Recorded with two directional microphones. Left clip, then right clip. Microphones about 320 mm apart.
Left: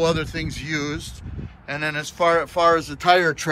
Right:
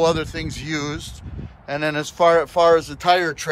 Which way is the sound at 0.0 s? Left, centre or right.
Centre.